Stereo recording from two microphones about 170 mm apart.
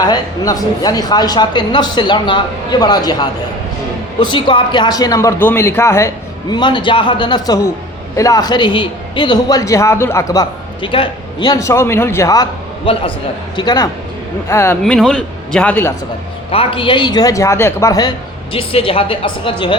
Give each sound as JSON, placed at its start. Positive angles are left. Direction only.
{"t": 0.0, "sound": "speech", "side_deg": 20}
{"t": 6.5, "sound": "speech", "side_deg": 25}
{"t": 10.8, "sound": "speech", "side_deg": 30}
{"t": 14.9, "sound": "a man's voice", "side_deg": 0}
{"t": 16.5, "sound": "speech", "side_deg": 30}
{"t": 18.5, "sound": "speech", "side_deg": 30}